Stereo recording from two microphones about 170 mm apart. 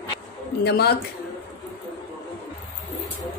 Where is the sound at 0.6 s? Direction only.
75° left (ahead or behind).